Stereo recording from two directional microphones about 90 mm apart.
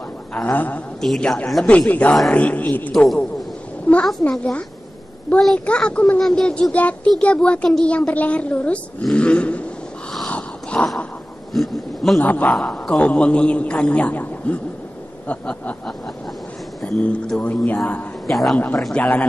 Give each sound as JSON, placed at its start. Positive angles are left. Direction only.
{"t": 0.3, "sound": "a man's voice", "side_deg": 15}
{"t": 1.0, "sound": "a man's voice", "side_deg": 5}
{"t": 1.7, "sound": "a man's voice", "side_deg": 15}
{"t": 2.9, "sound": "a man's voice", "side_deg": 5}
{"t": 10.1, "sound": "a sound", "side_deg": 15}
{"t": 11.5, "sound": "a sound", "side_deg": 0}
{"t": 12.2, "sound": "a man's voice", "side_deg": 20}
{"t": 17.0, "sound": "a man's voice", "side_deg": 15}
{"t": 18.2, "sound": "a man's voice", "side_deg": 0}